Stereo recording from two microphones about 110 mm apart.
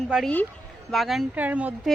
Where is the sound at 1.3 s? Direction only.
15° right (ahead or behind).